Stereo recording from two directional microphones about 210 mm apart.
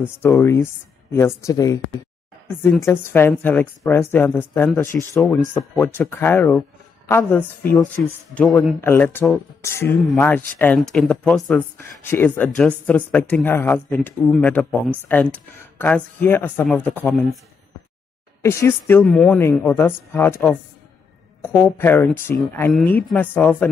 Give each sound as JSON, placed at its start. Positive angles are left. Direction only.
{"t": 0.2, "sound": "speech", "side_deg": 10}
{"t": 18.4, "sound": "speech", "side_deg": 15}